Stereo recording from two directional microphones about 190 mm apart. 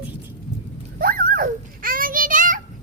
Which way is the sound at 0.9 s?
50° right (ahead or behind).